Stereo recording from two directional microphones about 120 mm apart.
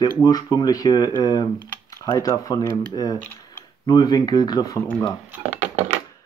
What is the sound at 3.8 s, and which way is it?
Speech, 35° left (ahead or behind).